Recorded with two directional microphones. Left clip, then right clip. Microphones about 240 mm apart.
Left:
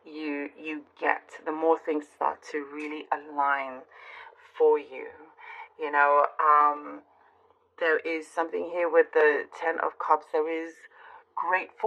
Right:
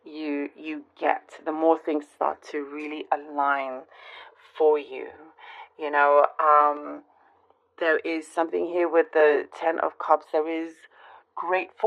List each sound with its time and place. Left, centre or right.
0.0 s a woman's voice: right